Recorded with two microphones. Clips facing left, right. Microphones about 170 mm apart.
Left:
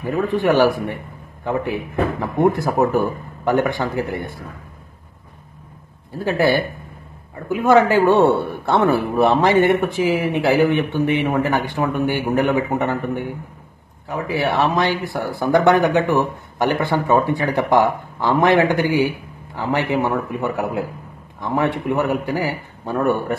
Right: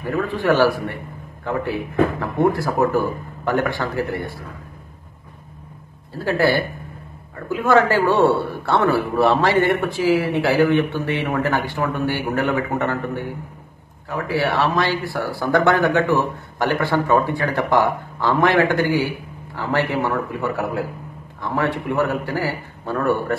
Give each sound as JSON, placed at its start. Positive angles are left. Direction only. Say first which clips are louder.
{"t": 0.0, "sound": "speech", "louder": "left 3 dB", "side_deg": 20}
{"t": 6.1, "sound": "a man's voice", "louder": "left 1 dB", "side_deg": 20}